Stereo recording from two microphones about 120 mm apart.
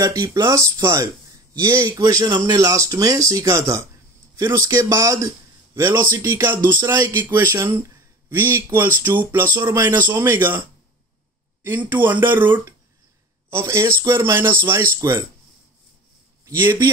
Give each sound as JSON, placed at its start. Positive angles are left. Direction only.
{"t": 0.0, "sound": "speech", "side_deg": -30}
{"t": 6.6, "sound": "a sound", "side_deg": -35}
{"t": 7.1, "sound": "speech", "side_deg": -20}
{"t": 11.6, "sound": "speech", "side_deg": -20}